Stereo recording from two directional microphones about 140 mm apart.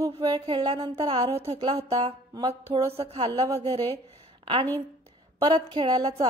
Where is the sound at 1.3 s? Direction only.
45° right (ahead or behind).